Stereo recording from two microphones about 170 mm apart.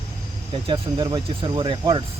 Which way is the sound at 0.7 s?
30° right (ahead or behind).